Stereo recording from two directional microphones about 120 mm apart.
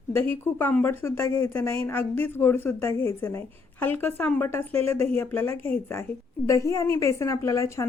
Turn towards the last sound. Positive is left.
turn(degrees=25)  # may be behind; listen again after turning